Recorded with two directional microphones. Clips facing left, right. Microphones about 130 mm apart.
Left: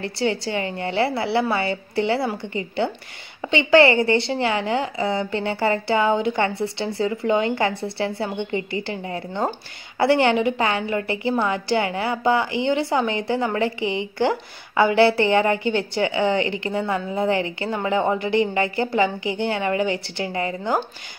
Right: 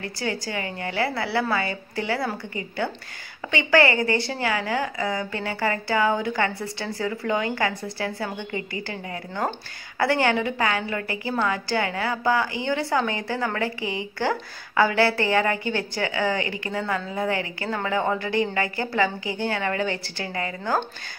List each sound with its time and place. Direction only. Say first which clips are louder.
0.0 s a woman's voice: left 6 dB; 25° left (ahead or behind)